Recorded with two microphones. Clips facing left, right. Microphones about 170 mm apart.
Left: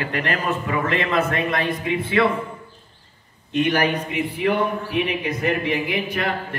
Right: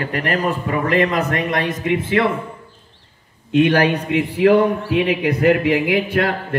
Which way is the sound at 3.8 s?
85° right.